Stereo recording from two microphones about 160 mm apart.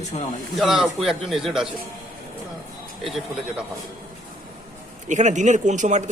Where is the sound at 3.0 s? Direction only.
Centre (ahead or behind).